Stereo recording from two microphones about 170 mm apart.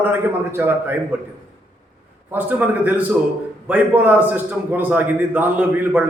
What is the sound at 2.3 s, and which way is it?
A man's voice, 10° right (ahead or behind).